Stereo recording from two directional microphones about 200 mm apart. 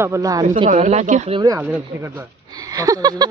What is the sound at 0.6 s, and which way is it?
Speech, 35° right (ahead or behind).